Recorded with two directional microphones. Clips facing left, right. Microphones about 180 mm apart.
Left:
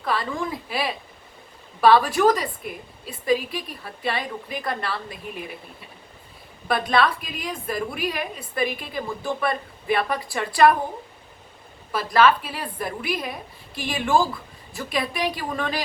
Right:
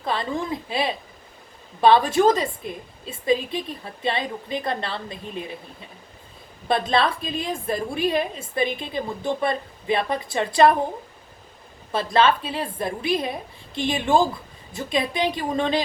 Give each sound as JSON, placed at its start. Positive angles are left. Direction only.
{"t": 0.0, "sound": "a woman's voice", "side_deg": -25}
{"t": 6.7, "sound": "a woman's voice", "side_deg": -25}
{"t": 11.9, "sound": "a woman's voice", "side_deg": -25}